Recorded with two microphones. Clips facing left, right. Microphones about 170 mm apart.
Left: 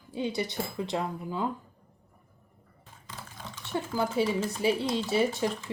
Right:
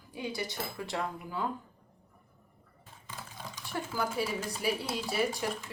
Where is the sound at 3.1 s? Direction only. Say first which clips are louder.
Left 1 dB; 10° right (ahead or behind).